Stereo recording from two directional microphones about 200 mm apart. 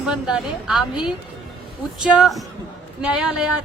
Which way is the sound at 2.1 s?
5° right (ahead or behind).